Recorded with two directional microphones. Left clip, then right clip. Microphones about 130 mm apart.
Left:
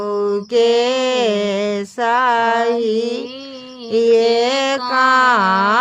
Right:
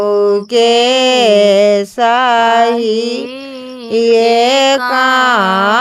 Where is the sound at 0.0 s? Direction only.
30° right (ahead or behind).